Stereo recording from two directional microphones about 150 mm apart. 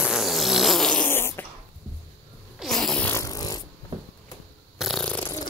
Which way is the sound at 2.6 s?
Centre (ahead or behind).